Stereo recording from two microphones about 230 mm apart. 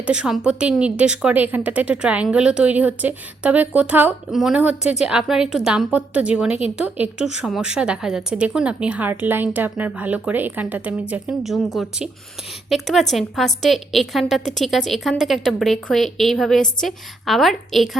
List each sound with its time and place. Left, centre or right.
0.0 s a woman's voice: centre